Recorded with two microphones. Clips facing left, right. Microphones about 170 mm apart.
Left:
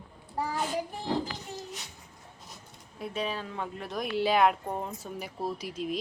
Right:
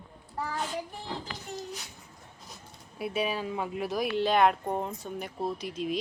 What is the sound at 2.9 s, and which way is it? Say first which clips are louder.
Speech: right 3 dB; 10° right (ahead or behind).